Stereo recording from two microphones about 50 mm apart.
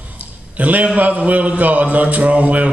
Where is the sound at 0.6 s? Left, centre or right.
Right.